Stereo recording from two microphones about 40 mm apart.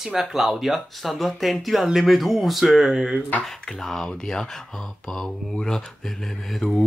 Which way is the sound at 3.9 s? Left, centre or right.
Centre.